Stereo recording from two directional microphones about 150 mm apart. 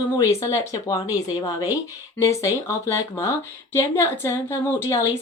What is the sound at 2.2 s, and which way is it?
Speech, 20° left (ahead or behind).